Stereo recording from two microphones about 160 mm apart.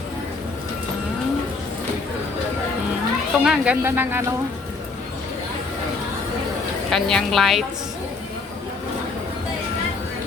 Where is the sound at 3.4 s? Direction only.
5° right (ahead or behind).